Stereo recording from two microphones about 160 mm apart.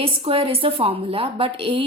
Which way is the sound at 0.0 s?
35° right (ahead or behind).